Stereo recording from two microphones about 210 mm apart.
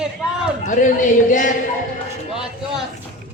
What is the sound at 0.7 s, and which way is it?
Speech, 35° left (ahead or behind).